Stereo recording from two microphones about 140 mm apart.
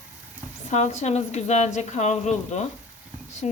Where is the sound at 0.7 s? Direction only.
55° left (ahead or behind).